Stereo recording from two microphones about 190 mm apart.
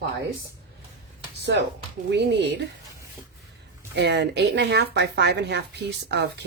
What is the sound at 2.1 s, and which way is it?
Speech, 65° right (ahead or behind).